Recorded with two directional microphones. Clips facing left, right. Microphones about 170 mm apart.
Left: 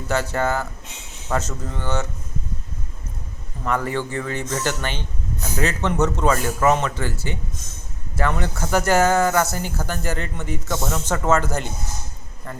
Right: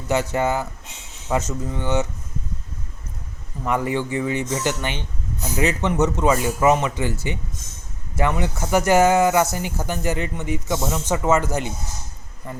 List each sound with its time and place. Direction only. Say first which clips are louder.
0.1 s speech: right 1 dB; 15° right (ahead or behind)
3.6 s speech: right 1 dB; 15° right (ahead or behind)